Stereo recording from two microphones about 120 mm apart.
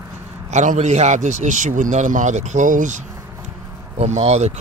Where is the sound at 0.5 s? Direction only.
75° right (ahead or behind).